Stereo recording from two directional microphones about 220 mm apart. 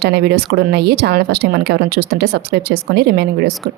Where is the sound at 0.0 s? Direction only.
50° right (ahead or behind).